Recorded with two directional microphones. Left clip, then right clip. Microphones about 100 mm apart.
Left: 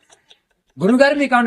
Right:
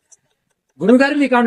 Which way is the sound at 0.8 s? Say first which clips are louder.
Even; 35° left (ahead or behind).